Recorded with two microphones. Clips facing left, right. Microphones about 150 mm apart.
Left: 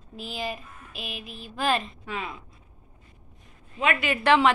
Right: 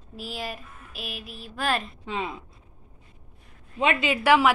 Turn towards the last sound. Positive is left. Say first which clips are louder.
# right 1 dB
turn(degrees=-10)  # may be behind; listen again after turning